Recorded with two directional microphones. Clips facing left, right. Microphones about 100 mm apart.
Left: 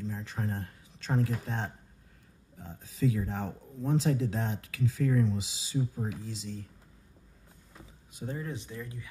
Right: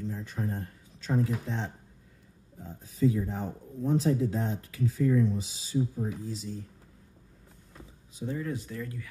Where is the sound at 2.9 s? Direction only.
90° left.